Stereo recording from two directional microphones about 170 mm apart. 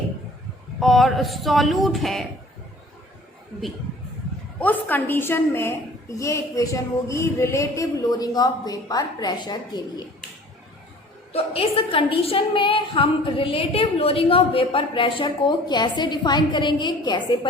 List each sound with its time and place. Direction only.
0.8 s speech: centre (ahead or behind)
4.6 s a woman's voice: 10° left (ahead or behind)
11.3 s a woman's voice: 35° left (ahead or behind)